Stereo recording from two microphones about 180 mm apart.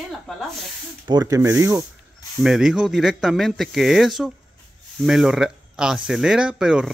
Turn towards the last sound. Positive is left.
turn(degrees=-5)  # may be behind; listen again after turning